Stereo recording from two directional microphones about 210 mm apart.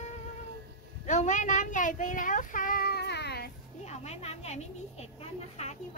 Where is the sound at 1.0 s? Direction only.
35° left (ahead or behind); by 3.4 s 50° left (ahead or behind).